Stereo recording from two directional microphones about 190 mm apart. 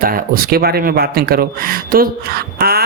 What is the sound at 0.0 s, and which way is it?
Speech, 50° right (ahead or behind).